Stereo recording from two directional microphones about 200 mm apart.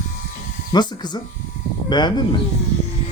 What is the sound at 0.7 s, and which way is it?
Speech, 20° left (ahead or behind).